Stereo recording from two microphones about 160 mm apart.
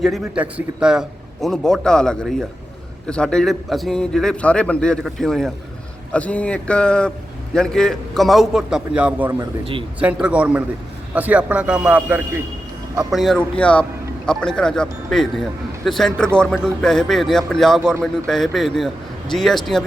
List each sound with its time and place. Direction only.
0.0 s a man's voice: 5° right (ahead or behind)
9.4 s a man's voice: 35° right (ahead or behind)
10.0 s a man's voice: 5° right (ahead or behind)
13.1 s speech: centre (ahead or behind)